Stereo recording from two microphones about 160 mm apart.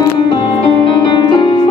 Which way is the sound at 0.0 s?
30° left (ahead or behind).